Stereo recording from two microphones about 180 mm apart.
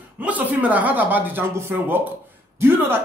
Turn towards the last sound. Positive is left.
turn(degrees=-15)  # may be behind; listen again after turning